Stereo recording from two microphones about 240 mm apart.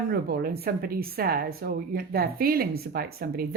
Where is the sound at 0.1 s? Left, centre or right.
Right.